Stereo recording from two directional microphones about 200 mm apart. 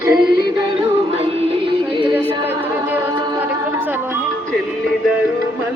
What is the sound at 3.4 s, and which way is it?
Music, 10° right (ahead or behind).